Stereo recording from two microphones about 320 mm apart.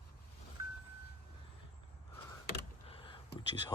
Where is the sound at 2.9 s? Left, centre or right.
Centre.